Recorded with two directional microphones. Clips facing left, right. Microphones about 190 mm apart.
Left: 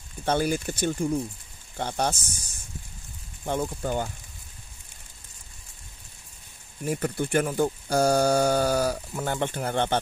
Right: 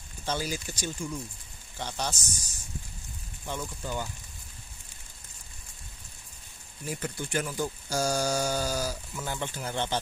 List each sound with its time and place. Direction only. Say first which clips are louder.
0.2 s speech: left 8 dB; 55° left (ahead or behind)
6.8 s speech: left 8 dB; 55° left (ahead or behind)